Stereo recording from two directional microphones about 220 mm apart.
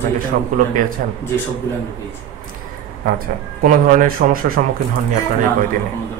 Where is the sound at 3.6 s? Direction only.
40° right (ahead or behind).